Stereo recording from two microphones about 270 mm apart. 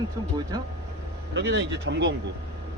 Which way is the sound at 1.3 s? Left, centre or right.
Right.